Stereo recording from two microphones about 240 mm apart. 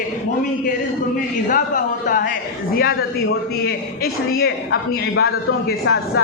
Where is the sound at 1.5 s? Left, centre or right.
Left.